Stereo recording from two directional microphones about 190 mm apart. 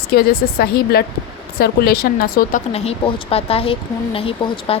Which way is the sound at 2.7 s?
35° left (ahead or behind).